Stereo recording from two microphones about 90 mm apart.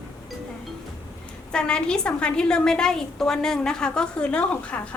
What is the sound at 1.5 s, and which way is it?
A woman's voice, 10° left (ahead or behind).